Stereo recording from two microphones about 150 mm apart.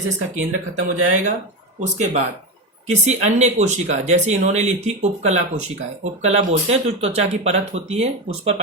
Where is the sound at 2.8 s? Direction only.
50° right (ahead or behind).